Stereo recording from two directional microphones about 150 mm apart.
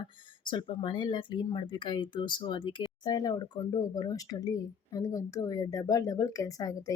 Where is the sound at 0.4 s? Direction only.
30° left (ahead or behind).